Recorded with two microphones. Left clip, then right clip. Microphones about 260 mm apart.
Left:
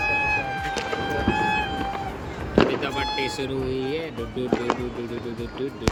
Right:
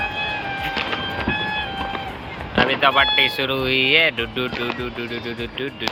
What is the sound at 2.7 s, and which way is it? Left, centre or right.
Speech, centre.